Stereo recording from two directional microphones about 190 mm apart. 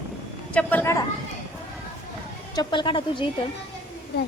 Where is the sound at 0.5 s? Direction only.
10° left (ahead or behind).